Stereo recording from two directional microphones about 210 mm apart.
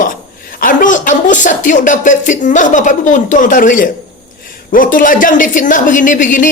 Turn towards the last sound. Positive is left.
turn(degrees=40)  # may be behind; listen again after turning